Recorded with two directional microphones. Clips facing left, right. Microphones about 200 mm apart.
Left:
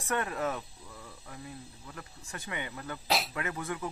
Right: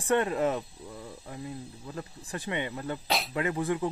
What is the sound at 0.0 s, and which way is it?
Speech, 25° right (ahead or behind).